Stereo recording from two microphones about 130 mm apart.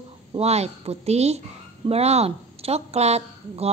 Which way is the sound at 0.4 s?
55° right (ahead or behind).